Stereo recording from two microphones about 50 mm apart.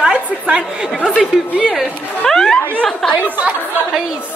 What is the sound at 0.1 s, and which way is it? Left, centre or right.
A woman's voice, centre.